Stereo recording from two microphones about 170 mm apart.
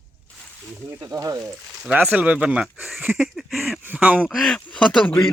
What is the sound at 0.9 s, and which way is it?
Speech, 20° right (ahead or behind).